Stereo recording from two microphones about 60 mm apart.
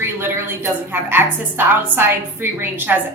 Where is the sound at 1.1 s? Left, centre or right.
Right.